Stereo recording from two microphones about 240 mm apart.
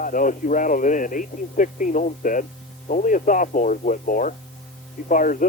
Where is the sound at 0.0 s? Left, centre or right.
Left.